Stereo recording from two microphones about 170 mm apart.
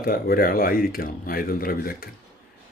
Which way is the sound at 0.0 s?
60° left (ahead or behind).